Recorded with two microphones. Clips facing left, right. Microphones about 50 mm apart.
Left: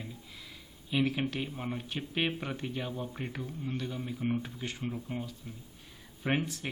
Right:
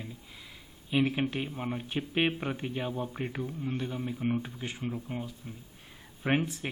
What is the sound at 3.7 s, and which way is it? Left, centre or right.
Speech, right.